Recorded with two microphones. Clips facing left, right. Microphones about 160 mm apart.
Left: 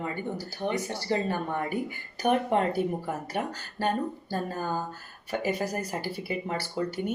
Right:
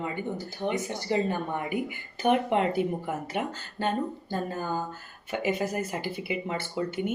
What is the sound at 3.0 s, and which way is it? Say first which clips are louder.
Speech: right 1 dB; 20° right (ahead or behind).